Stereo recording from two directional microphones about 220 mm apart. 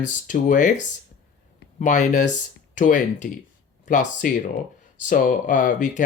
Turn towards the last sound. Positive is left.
turn(degrees=35)  # may be behind; listen again after turning